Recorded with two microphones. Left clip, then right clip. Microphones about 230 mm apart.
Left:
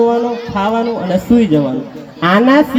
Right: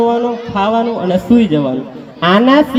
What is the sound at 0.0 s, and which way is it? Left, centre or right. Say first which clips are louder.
A man's voice: left 1 dB; right.